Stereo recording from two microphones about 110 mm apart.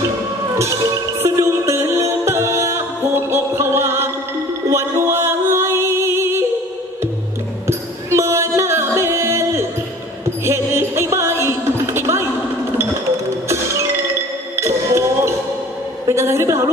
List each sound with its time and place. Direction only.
1.2 s music: 25° right (ahead or behind)
7.6 s music: 25° right (ahead or behind)
14.6 s music: 25° right (ahead or behind)
16.1 s a sound: 25° right (ahead or behind)